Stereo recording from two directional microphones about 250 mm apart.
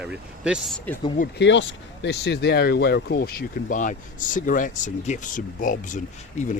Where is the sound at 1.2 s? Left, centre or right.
Left.